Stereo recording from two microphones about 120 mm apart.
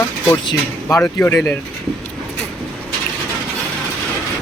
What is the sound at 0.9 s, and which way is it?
Speech, 20° left (ahead or behind).